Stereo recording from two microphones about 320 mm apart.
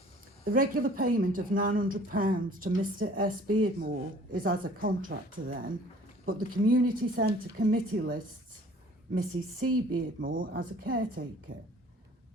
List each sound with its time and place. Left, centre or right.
0.4 s speech: right
9.3 s speech: right
10.2 s speech: right